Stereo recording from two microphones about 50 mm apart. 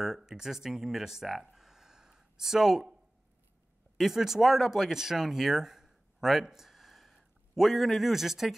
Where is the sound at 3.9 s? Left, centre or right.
Centre.